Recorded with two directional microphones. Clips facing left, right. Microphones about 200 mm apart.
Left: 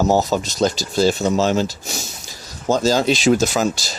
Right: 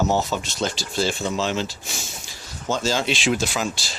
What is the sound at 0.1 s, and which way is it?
Speech, 40° left (ahead or behind).